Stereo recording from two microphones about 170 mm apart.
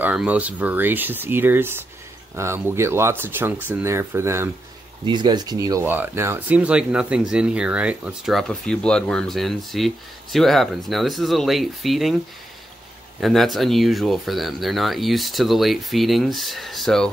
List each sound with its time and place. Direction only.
0.0 s speech: 5° right (ahead or behind)
5.0 s speech: 25° right (ahead or behind); by 12.2 s centre (ahead or behind)
13.2 s speech: centre (ahead or behind)